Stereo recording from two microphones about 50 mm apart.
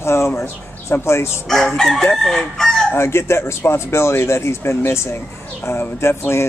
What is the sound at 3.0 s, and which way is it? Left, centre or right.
Speech, left.